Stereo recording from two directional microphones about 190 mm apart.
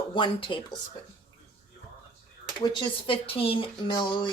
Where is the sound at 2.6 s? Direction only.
30° left (ahead or behind).